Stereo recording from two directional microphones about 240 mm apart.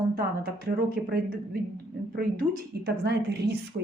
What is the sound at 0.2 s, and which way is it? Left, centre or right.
Speech, right.